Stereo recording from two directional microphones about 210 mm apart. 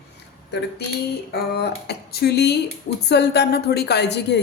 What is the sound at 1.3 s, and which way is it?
A woman's voice, 50° left (ahead or behind).